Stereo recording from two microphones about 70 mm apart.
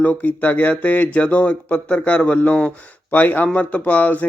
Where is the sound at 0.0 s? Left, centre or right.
Left.